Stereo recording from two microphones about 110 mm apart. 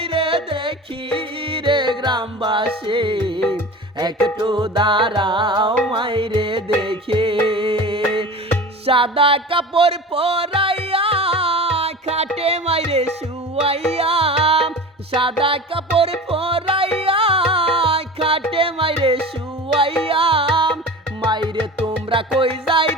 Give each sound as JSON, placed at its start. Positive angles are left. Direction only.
{"t": 0.0, "sound": "music", "side_deg": -55}
{"t": 3.9, "sound": "music", "side_deg": -40}
{"t": 21.2, "sound": "music", "side_deg": -45}